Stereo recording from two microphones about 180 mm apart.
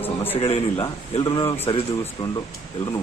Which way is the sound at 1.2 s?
15° left (ahead or behind).